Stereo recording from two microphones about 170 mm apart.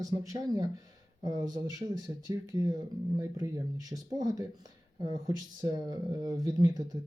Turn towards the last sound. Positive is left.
turn(degrees=-25)  # may be behind; listen again after turning